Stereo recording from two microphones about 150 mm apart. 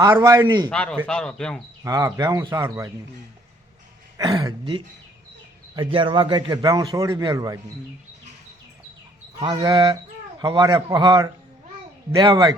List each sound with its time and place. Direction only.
0.0 s a man's voice: 25° right (ahead or behind)
0.7 s speech: 5° left (ahead or behind)
1.8 s a man's voice: 25° right (ahead or behind)
4.2 s a man's voice: 25° right (ahead or behind)
5.7 s a man's voice: 35° right (ahead or behind)
9.6 s a man's voice: 25° right (ahead or behind)